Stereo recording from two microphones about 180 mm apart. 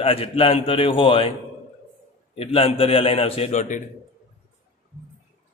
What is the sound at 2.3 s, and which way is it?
A man's voice, 35° left (ahead or behind).